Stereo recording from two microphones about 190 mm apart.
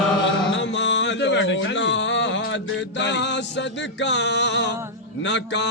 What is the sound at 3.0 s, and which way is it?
Music, 65° left (ahead or behind).